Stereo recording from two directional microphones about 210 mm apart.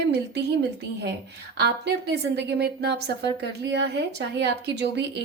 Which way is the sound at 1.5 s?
50° right (ahead or behind).